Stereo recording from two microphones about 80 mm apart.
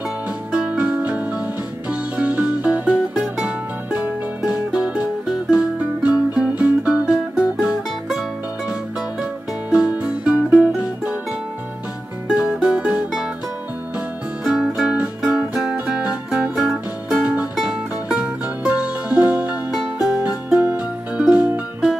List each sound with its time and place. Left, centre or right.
0.5 s music: centre
9.2 s music: centre
12.4 s music: centre
14.4 s music: centre
19.7 s music: centre
20.6 s music: centre